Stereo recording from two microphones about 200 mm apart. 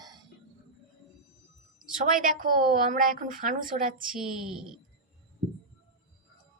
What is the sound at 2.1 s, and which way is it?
A woman's voice, 45° right (ahead or behind).